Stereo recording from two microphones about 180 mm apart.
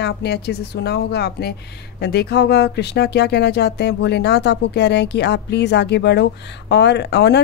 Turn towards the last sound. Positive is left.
turn(degrees=70)  # may be behind; listen again after turning